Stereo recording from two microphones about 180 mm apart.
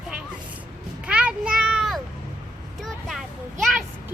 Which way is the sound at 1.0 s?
5° right (ahead or behind).